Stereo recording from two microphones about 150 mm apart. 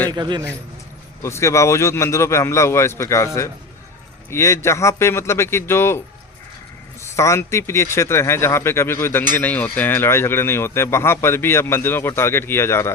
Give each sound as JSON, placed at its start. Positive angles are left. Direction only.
{"t": 0.1, "sound": "a man's voice", "side_deg": -30}
{"t": 1.2, "sound": "a man's voice", "side_deg": 20}
{"t": 4.3, "sound": "speech", "side_deg": 20}
{"t": 7.0, "sound": "speech", "side_deg": 20}